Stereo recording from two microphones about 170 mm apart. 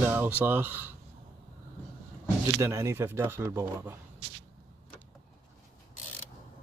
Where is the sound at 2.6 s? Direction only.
20° right (ahead or behind).